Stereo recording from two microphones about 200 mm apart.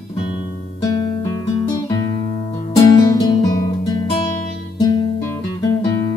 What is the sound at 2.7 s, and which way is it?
Music, 15° left (ahead or behind).